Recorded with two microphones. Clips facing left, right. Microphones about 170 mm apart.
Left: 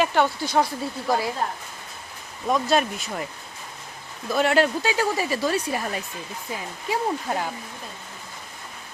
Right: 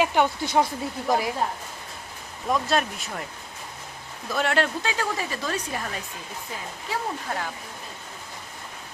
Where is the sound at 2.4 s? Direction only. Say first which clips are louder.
Left 3 dB; 5° left (ahead or behind).